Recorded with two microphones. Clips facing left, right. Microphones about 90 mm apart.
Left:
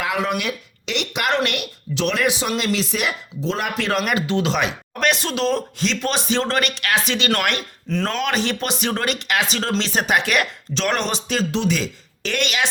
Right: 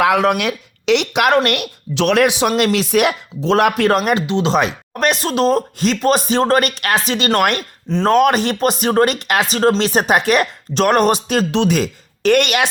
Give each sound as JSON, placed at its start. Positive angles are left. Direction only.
{"t": 0.0, "sound": "speech", "side_deg": -75}
{"t": 1.5, "sound": "speech", "side_deg": -60}
{"t": 2.5, "sound": "speech", "side_deg": -55}
{"t": 4.3, "sound": "speech", "side_deg": -25}
{"t": 4.5, "sound": "speech", "side_deg": -40}
{"t": 7.9, "sound": "speech", "side_deg": -25}
{"t": 8.1, "sound": "speech", "side_deg": -50}